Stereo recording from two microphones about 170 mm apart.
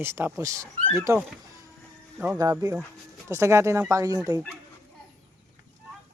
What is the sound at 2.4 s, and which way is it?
Speech, 20° right (ahead or behind).